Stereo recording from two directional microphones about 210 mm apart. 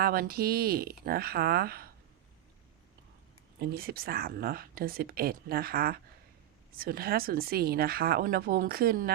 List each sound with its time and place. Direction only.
0.0 s speech: 45° right (ahead or behind)
3.6 s speech: 50° right (ahead or behind)